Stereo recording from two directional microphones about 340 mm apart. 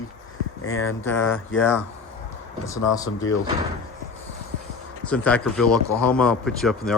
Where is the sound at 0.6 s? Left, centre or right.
Left.